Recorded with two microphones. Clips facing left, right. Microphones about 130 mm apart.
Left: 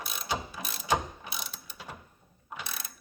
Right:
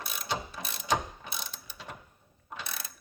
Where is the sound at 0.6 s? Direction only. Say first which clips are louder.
Left 1 dB; 5° left (ahead or behind).